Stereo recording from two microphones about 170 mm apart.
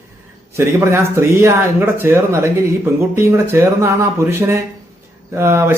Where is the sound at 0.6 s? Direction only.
15° right (ahead or behind).